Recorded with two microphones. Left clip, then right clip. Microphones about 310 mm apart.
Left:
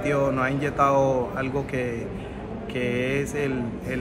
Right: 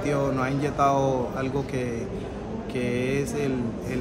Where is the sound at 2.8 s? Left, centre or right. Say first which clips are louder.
Left 1 dB; centre.